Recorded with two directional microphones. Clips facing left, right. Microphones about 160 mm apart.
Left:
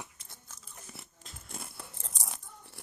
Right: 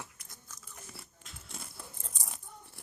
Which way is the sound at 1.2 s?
40° left (ahead or behind).